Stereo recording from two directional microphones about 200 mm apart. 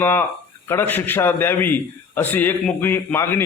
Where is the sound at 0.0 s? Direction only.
10° left (ahead or behind).